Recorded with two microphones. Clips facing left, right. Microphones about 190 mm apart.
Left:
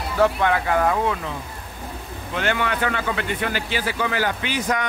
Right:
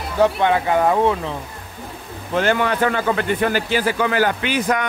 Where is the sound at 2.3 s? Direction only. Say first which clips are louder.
Right 5 dB; 40° right (ahead or behind).